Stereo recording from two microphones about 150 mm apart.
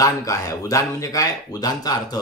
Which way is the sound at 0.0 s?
20° left (ahead or behind).